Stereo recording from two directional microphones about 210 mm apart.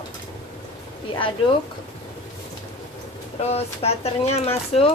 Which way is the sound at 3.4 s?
30° left (ahead or behind).